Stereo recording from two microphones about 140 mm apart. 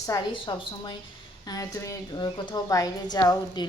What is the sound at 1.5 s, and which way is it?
A woman's voice, 25° left (ahead or behind).